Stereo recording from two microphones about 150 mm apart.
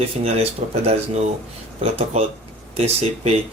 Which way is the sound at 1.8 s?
40° right (ahead or behind).